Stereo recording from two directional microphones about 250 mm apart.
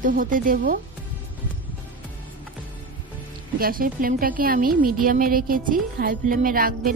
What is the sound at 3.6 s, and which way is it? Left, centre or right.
A woman's voice, right.